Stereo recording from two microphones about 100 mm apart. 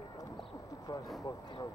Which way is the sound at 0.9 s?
45° left (ahead or behind).